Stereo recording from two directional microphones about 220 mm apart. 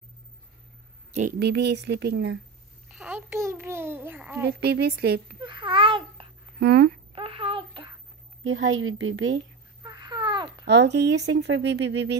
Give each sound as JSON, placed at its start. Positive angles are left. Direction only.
{"t": 1.4, "sound": "speech", "side_deg": -50}
{"t": 2.9, "sound": "a child's voice", "side_deg": -5}
{"t": 4.5, "sound": "speech", "side_deg": -50}
{"t": 5.4, "sound": "babbling", "side_deg": -20}
{"t": 6.6, "sound": "speech", "side_deg": -45}
{"t": 7.2, "sound": "a sound", "side_deg": -25}
{"t": 8.5, "sound": "a woman's voice", "side_deg": -60}
{"t": 9.8, "sound": "babbling", "side_deg": -20}
{"t": 10.7, "sound": "speech", "side_deg": -50}